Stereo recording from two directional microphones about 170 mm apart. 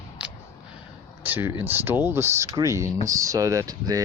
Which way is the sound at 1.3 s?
10° right (ahead or behind).